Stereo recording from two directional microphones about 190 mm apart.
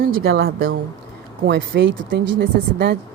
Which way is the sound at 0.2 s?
55° right (ahead or behind).